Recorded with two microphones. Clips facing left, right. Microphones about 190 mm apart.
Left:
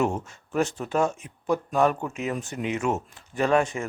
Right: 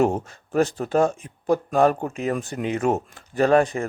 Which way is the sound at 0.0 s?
35° right (ahead or behind).